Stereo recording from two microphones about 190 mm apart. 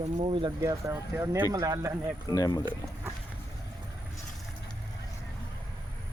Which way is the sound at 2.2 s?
20° left (ahead or behind).